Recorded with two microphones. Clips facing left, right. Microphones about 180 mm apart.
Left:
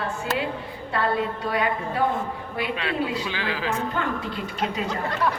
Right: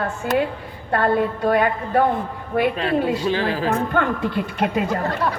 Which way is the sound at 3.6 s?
60° right (ahead or behind).